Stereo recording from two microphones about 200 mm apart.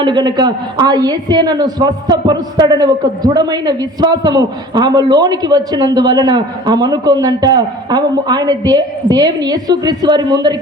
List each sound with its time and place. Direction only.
0.0 s a woman's voice: 25° right (ahead or behind)